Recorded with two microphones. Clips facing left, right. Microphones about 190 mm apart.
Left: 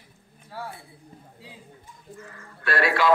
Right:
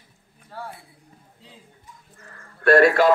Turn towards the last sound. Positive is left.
turn(degrees=-45)  # may be behind; listen again after turning